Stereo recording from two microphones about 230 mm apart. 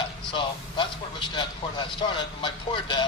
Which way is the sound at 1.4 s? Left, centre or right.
Centre.